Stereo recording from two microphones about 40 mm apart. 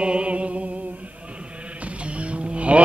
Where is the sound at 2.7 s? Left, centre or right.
Right.